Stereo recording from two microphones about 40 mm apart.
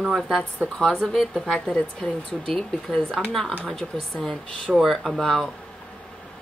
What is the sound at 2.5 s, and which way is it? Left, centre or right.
Speech, centre.